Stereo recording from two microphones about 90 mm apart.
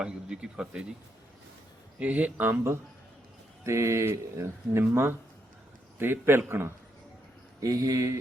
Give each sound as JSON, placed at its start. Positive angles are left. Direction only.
{"t": 0.0, "sound": "speech", "side_deg": -10}
{"t": 2.0, "sound": "speech", "side_deg": -15}
{"t": 3.7, "sound": "a man's voice", "side_deg": -30}
{"t": 7.6, "sound": "speech", "side_deg": -40}